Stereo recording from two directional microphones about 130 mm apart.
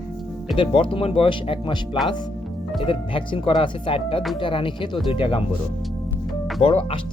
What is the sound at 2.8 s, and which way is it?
Speech, 40° left (ahead or behind).